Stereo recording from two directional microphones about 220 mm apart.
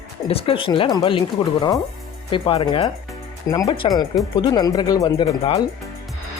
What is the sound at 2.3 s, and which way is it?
Speech, 25° left (ahead or behind).